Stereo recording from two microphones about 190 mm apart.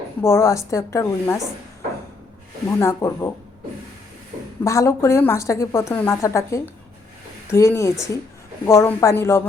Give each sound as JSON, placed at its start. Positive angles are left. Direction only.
{"t": 0.2, "sound": "a woman's voice", "side_deg": 15}
{"t": 2.6, "sound": "a woman's voice", "side_deg": 15}
{"t": 4.6, "sound": "a woman's voice", "side_deg": 15}